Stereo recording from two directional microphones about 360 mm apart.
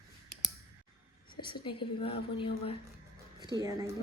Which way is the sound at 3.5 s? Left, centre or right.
Centre.